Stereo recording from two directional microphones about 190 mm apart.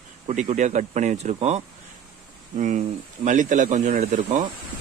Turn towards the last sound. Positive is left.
turn(degrees=-35)  # may be behind; listen again after turning